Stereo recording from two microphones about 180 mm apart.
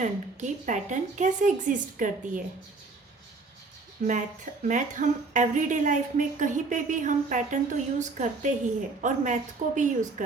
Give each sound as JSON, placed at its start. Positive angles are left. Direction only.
{"t": 0.0, "sound": "a woman's voice", "side_deg": -45}
{"t": 4.0, "sound": "a woman's voice", "side_deg": -50}